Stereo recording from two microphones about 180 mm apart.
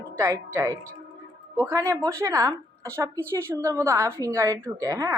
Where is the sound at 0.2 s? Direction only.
15° right (ahead or behind).